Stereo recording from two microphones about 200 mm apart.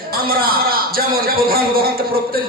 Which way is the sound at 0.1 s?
45° right (ahead or behind).